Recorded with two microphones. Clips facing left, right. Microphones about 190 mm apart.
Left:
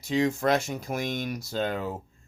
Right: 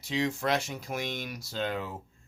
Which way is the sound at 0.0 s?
45° left (ahead or behind).